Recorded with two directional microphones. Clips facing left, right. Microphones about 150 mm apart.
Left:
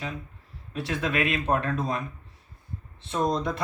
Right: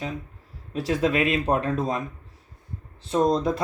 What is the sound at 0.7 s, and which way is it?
Speech, 35° right (ahead or behind).